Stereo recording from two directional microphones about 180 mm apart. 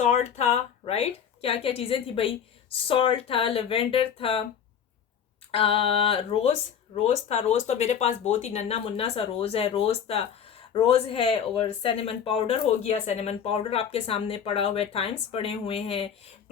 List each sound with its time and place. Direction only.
0.0 s speech: 40° left (ahead or behind)
5.5 s speech: 30° left (ahead or behind)